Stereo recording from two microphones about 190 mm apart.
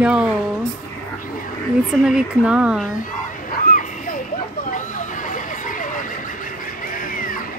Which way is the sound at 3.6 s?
45° left (ahead or behind).